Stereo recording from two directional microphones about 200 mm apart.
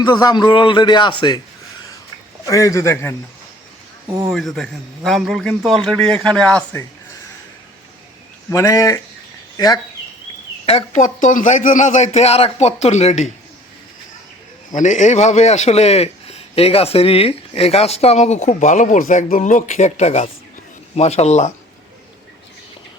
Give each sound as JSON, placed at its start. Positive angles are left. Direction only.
{"t": 0.0, "sound": "a man's voice", "side_deg": 20}
{"t": 2.5, "sound": "a man's voice", "side_deg": 15}
{"t": 4.3, "sound": "a man's voice", "side_deg": 0}
{"t": 8.4, "sound": "a man's voice", "side_deg": 15}
{"t": 10.7, "sound": "a man's voice", "side_deg": 35}
{"t": 14.8, "sound": "a man's voice", "side_deg": 35}